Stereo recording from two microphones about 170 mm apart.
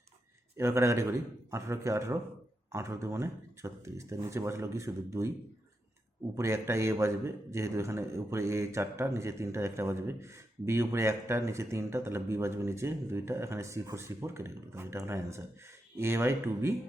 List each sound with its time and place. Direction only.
0.5 s a man's voice: 15° right (ahead or behind)
6.3 s a man's voice: 15° right (ahead or behind)